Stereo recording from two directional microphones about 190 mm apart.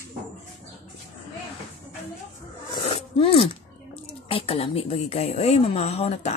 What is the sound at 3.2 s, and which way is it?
A woman's voice, 30° left (ahead or behind).